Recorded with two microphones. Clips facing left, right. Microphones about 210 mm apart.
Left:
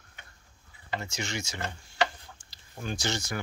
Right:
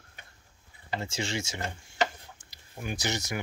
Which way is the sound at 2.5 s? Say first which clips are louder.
Even; 15° right (ahead or behind).